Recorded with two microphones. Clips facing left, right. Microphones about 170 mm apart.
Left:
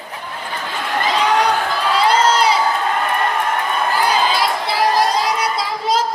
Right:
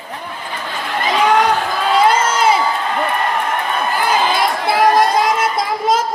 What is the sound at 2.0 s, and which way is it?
Crowd, 50° right (ahead or behind).